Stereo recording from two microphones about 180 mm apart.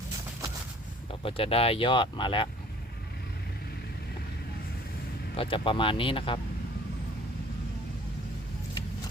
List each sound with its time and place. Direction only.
1.2 s speech: 30° left (ahead or behind)
5.4 s speech: 30° left (ahead or behind)